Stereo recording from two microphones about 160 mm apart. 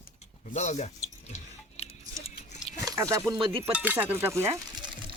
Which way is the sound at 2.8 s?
20° right (ahead or behind).